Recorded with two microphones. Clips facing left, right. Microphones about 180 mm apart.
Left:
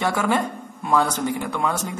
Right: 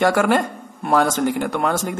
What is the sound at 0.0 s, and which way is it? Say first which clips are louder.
Speech: right 5 dB; 90° right.